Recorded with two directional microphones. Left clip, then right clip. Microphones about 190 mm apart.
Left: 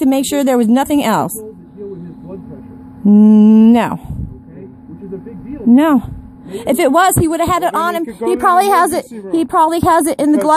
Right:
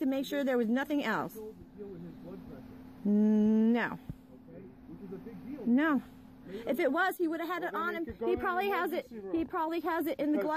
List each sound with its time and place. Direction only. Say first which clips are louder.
0.0 s a woman's voice: left 18 dB; 50° left (ahead or behind)
3.1 s a woman's voice: left 19 dB; 45° left (ahead or behind)
5.8 s a woman's voice: left 16 dB; 40° left (ahead or behind)